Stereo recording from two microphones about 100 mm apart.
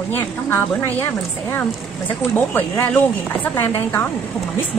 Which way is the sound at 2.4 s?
20° left (ahead or behind).